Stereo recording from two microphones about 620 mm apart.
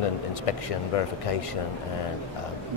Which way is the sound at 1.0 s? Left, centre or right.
Left.